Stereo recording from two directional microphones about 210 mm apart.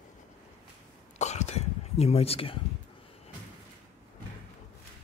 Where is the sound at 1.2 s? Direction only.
30° left (ahead or behind).